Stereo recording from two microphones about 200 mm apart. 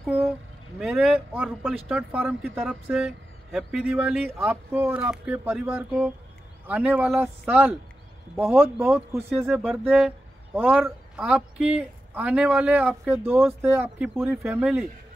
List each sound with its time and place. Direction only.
0.0 s vehicle: 10° right (ahead or behind)
0.7 s a man's voice: 5° right (ahead or behind)